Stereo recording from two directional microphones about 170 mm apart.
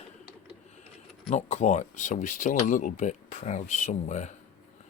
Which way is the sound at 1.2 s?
40° left (ahead or behind).